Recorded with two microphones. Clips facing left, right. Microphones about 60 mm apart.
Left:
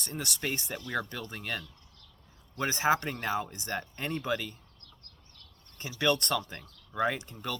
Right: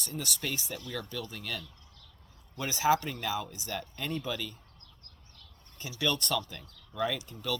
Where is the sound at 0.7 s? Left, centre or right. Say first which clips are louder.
Left 3 dB; left.